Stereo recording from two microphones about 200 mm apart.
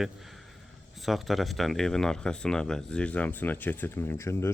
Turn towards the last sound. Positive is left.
turn(degrees=15)  # may be behind; listen again after turning